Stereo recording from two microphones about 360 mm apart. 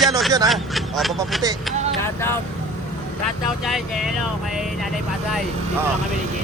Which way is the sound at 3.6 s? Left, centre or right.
Centre.